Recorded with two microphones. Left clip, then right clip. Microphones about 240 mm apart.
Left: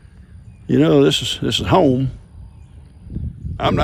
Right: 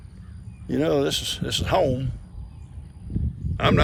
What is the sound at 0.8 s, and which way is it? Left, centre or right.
Speech, left.